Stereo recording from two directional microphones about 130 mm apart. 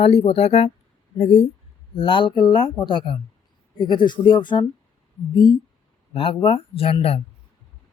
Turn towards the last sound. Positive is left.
turn(degrees=50)  # may be behind; listen again after turning